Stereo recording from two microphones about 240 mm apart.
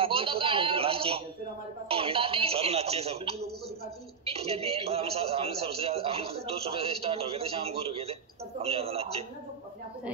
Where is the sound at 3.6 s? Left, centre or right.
Right.